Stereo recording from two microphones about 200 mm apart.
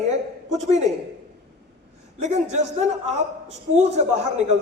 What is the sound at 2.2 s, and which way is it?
Speech, 35° right (ahead or behind).